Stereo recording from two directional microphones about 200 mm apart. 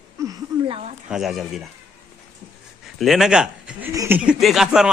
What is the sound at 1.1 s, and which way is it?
Speech, centre (ahead or behind).